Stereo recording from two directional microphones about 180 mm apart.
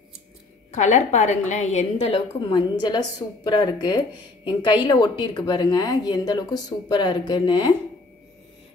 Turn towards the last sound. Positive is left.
turn(degrees=25)  # may be behind; listen again after turning